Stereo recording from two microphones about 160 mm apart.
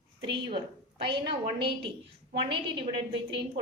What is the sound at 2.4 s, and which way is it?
A woman's voice, 35° right (ahead or behind).